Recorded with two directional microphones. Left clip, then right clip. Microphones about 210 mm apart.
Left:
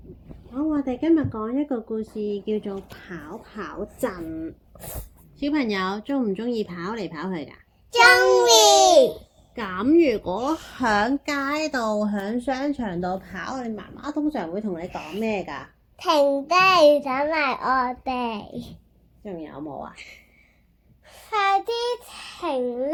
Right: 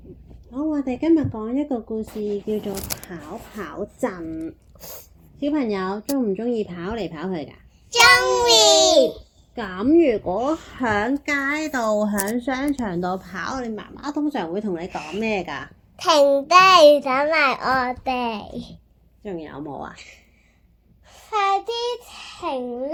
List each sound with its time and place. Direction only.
0.5 s speech: 20° right (ahead or behind)
3.1 s a woman's voice: 15° right (ahead or behind)
4.7 s sneeze: 30° left (ahead or behind)
5.4 s a woman's voice: 5° right (ahead or behind)
7.9 s a child's voice: 30° left (ahead or behind)
9.6 s a woman's voice: 5° right (ahead or behind); by 14.8 s 25° right (ahead or behind)
14.8 s speech: 5° right (ahead or behind)
15.2 s speech: 20° right (ahead or behind)
16.0 s a woman's voice: 10° right (ahead or behind)
19.2 s speech: 20° right (ahead or behind)
19.9 s a child's voice: 25° left (ahead or behind)